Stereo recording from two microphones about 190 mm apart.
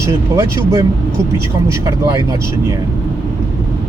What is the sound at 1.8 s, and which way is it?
Speech, 20° right (ahead or behind).